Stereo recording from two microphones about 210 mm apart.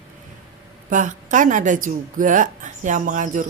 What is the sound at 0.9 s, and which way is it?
A woman's voice, 40° right (ahead or behind).